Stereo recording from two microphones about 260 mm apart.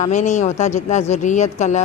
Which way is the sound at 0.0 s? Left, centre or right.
Left.